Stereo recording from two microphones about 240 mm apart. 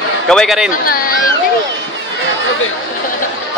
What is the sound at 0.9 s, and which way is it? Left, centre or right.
Speech, left.